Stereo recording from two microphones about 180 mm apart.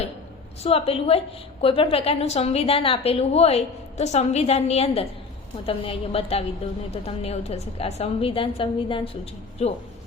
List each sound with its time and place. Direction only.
0.6 s a woman's voice: 35° left (ahead or behind)